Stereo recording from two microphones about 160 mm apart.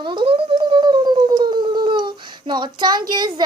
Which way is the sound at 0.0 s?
30° right (ahead or behind).